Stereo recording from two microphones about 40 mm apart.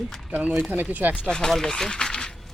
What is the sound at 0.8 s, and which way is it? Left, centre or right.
Speech, right.